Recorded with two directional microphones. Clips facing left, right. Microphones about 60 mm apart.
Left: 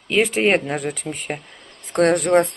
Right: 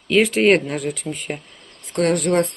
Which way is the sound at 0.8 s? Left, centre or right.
Left.